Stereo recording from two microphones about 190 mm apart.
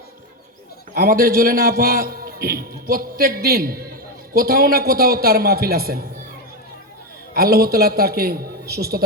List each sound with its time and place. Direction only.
0.9 s a man's voice: 50° right (ahead or behind)
7.3 s a man's voice: 55° right (ahead or behind)